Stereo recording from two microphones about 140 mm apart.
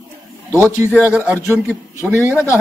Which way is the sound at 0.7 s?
15° right (ahead or behind).